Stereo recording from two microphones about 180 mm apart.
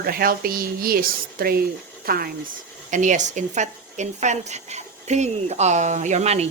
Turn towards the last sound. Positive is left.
turn(degrees=-40)  # may be behind; listen again after turning